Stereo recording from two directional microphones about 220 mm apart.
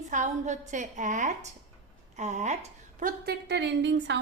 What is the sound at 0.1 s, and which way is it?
A woman's voice, 35° right (ahead or behind).